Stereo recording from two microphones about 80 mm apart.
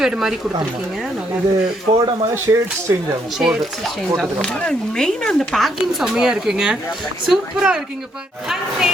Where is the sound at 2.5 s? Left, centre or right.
Right.